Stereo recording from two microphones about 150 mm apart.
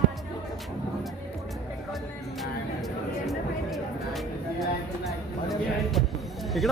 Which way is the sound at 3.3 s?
Centre (ahead or behind).